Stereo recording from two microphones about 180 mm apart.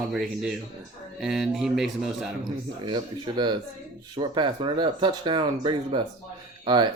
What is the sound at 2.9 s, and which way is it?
Speech, 25° right (ahead or behind).